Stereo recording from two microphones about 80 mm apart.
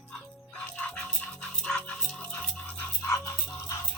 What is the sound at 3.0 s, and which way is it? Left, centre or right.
Rattle, left.